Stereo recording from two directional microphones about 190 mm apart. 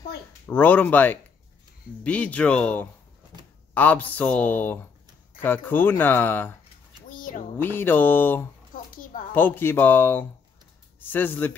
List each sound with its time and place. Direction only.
0.5 s speech: 10° left (ahead or behind)
7.2 s a sound: 45° left (ahead or behind)
7.5 s speech: 10° left (ahead or behind)